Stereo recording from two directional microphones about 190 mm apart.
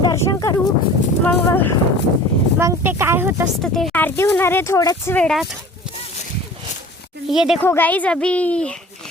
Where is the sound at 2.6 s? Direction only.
15° right (ahead or behind).